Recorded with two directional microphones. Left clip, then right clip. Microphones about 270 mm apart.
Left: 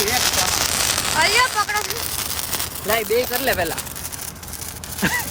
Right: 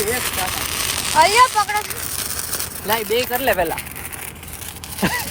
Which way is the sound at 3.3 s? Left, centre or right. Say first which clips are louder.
Right 2 dB; centre.